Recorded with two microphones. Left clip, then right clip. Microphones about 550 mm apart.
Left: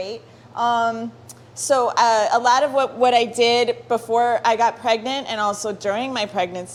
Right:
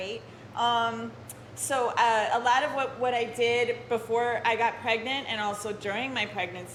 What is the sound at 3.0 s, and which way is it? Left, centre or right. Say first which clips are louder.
A woman's voice: left 11 dB; left.